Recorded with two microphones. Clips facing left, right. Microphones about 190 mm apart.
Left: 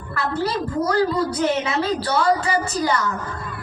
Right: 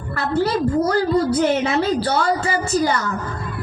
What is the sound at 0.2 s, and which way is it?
A woman's voice, 30° right (ahead or behind).